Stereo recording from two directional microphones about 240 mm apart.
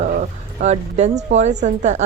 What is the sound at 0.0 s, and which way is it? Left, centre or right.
Speech, right.